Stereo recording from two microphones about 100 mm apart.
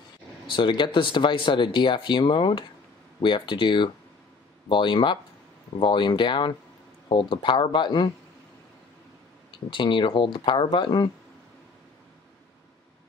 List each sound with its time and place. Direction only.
0.5 s speech: 55° left (ahead or behind)
9.5 s speech: 55° left (ahead or behind)